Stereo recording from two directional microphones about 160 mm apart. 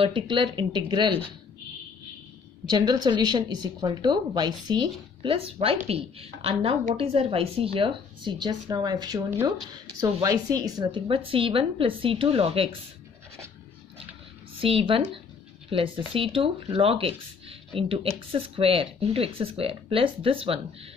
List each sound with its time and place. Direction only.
0.0 s a woman's voice: 30° right (ahead or behind)
2.7 s a woman's voice: 25° right (ahead or behind)
14.6 s speech: 35° right (ahead or behind)